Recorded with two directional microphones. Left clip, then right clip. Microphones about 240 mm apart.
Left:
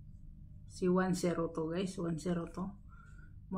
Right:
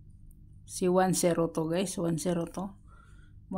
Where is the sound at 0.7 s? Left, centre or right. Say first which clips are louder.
Right 7 dB; right.